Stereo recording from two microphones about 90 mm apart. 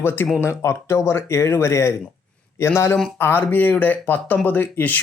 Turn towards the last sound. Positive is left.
turn(degrees=20)  # may be behind; listen again after turning